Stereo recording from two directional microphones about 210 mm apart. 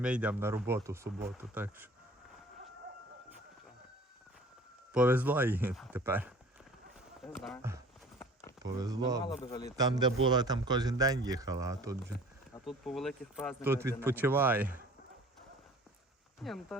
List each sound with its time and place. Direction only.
0.0 s speech: 5° right (ahead or behind)
4.9 s speech: 5° right (ahead or behind)
8.2 s a sound: 10° left (ahead or behind)
8.8 s speech: 15° right (ahead or behind)
9.2 s a man's voice: 20° left (ahead or behind)
9.7 s speech: 20° right (ahead or behind)
12.6 s speech: centre (ahead or behind)
13.7 s speech: 10° right (ahead or behind)
16.4 s speech: centre (ahead or behind)